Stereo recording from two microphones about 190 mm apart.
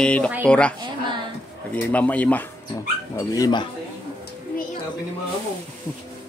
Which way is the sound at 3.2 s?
20° left (ahead or behind).